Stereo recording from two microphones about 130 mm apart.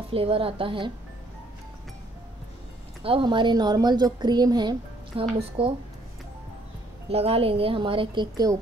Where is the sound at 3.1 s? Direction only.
40° right (ahead or behind).